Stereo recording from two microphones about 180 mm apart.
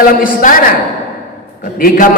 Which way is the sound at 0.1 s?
50° left (ahead or behind).